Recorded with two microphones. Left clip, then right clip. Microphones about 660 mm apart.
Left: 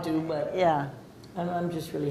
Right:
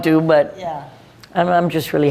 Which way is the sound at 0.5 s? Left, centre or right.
Left.